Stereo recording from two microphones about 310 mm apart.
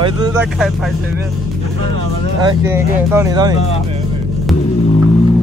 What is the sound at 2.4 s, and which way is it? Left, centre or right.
Speech, centre.